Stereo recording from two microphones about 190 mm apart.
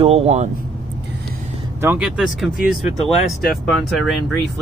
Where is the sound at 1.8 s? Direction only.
5° right (ahead or behind).